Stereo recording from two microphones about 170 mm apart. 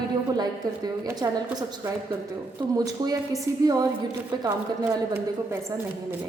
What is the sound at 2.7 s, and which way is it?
Speech, 20° right (ahead or behind).